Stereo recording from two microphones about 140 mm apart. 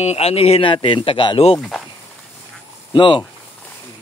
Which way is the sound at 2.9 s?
35° left (ahead or behind).